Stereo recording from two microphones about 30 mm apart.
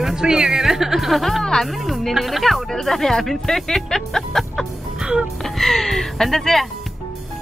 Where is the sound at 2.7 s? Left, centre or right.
Centre.